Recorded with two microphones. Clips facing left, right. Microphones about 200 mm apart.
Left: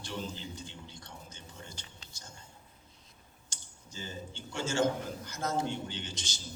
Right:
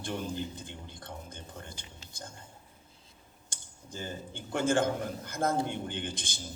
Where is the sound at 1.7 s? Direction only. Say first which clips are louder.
Right 2 dB; 15° right (ahead or behind).